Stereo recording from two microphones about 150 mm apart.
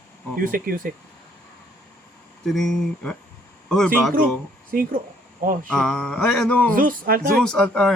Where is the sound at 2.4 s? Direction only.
Centre (ahead or behind).